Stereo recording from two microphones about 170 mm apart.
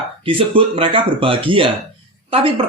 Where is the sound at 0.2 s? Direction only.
30° right (ahead or behind).